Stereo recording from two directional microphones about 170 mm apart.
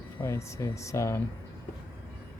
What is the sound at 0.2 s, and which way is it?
Speech, 15° left (ahead or behind).